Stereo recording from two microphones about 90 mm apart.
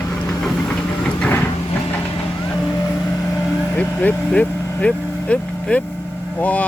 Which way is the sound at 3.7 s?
15° left (ahead or behind).